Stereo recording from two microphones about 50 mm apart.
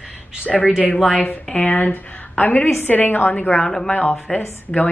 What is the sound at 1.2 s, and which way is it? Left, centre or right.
A woman's voice, left.